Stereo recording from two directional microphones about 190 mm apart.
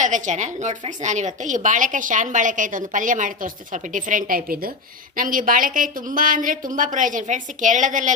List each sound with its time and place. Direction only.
0.0 s a woman's voice: 40° right (ahead or behind)